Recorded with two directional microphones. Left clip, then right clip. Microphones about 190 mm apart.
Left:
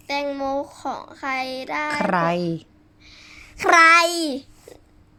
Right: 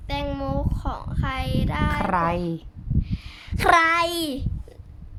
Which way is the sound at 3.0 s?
15° left (ahead or behind).